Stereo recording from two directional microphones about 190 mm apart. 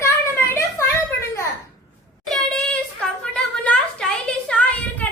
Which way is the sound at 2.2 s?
5° left (ahead or behind).